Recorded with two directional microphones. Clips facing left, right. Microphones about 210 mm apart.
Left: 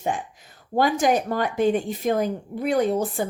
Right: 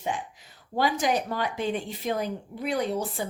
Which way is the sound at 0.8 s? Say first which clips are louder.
Left 5 dB; 50° left (ahead or behind).